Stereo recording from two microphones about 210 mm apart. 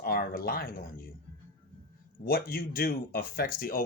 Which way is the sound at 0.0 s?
45° left (ahead or behind).